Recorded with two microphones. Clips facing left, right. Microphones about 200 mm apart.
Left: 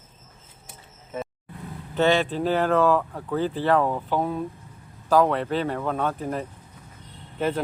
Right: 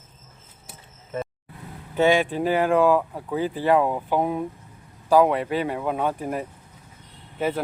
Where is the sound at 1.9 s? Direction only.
10° right (ahead or behind).